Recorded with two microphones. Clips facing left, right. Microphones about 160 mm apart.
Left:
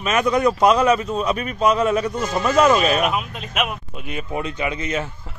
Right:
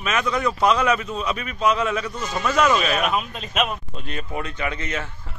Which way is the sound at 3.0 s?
10° left (ahead or behind).